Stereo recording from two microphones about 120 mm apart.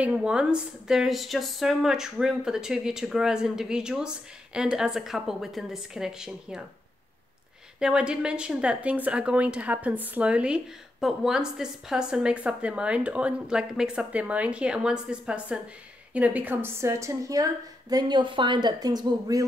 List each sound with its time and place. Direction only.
0.0 s speech: 10° right (ahead or behind)
7.8 s a woman's voice: 10° right (ahead or behind); by 19.4 s 30° right (ahead or behind)